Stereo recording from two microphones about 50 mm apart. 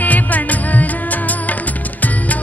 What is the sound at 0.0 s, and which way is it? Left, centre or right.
Music, left.